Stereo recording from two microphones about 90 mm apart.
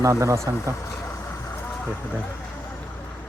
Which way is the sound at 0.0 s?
35° right (ahead or behind).